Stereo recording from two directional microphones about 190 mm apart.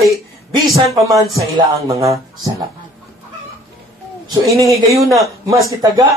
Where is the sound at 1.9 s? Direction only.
15° right (ahead or behind).